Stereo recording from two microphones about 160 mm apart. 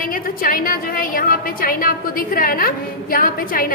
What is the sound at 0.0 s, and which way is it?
A woman's voice, 60° left (ahead or behind).